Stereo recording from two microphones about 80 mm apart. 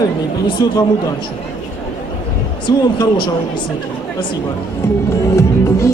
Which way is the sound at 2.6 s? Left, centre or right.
Left.